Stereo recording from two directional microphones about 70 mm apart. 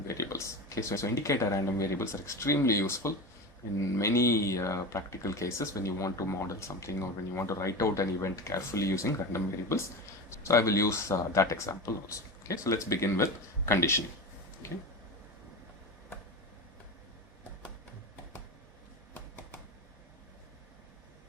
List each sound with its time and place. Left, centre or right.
0.1 s speech: left